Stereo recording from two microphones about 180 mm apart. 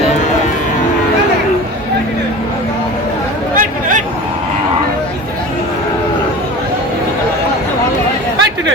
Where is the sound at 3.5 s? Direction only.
45° right (ahead or behind).